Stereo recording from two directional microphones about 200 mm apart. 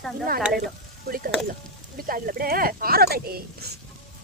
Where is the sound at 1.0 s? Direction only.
45° right (ahead or behind).